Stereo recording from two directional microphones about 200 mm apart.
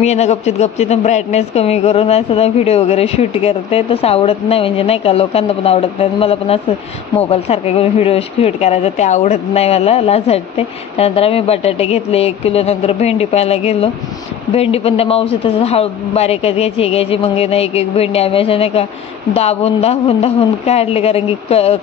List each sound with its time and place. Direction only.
0.0 s a woman's voice: 35° left (ahead or behind)